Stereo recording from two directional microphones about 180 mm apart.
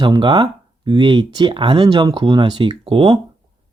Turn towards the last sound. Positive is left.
turn(degrees=-30)  # may be behind; listen again after turning